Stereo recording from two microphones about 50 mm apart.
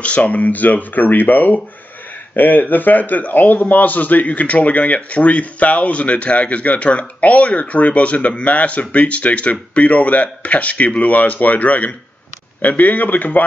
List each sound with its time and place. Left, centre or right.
0.0 s a man's voice: left